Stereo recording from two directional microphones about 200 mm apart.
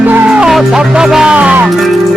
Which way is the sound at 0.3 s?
5° right (ahead or behind).